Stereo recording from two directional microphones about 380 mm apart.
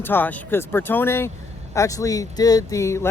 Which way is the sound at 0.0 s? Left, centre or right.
Centre.